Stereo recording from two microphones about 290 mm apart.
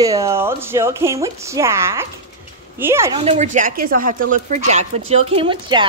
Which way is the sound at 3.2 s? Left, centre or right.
Right.